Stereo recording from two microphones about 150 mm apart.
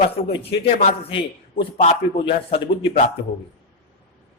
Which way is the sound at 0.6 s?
50° left (ahead or behind).